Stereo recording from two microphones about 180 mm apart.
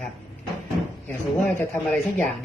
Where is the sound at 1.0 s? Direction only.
10° left (ahead or behind).